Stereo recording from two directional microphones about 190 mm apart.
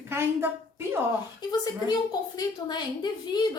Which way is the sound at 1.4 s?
20° left (ahead or behind).